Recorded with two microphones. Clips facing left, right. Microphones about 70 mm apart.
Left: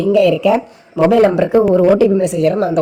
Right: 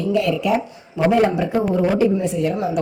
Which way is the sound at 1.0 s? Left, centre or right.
Left.